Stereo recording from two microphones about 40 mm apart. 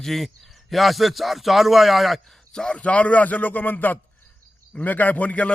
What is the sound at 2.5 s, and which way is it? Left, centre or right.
Speech, centre.